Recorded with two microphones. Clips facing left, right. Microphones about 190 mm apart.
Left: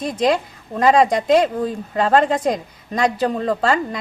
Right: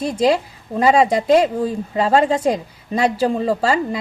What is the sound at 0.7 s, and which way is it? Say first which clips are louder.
A woman's voice: even; 5° right (ahead or behind).